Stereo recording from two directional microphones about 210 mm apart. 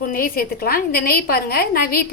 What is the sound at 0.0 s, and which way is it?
A woman's voice, 45° left (ahead or behind).